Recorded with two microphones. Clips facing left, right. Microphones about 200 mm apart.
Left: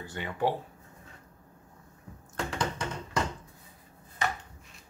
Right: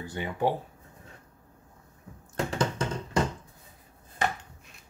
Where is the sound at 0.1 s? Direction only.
15° right (ahead or behind).